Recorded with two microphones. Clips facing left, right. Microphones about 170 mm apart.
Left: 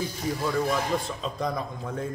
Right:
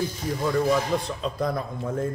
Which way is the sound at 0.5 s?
Centre (ahead or behind).